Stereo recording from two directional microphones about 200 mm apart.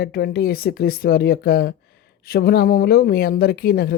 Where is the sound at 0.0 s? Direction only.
50° left (ahead or behind).